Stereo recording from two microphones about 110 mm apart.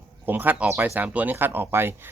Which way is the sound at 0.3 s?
15° right (ahead or behind).